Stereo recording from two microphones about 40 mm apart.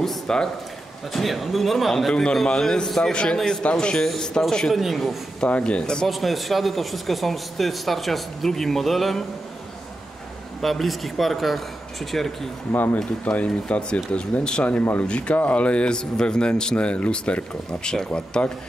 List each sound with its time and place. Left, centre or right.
0.3 s speech: centre
1.1 s speech: centre; by 3.3 s left
3.3 s speech: centre
5.4 s speech: left
6.0 s speech: centre
10.6 s speech: centre
12.7 s speech: left
14.6 s speech: left
15.0 s speech: left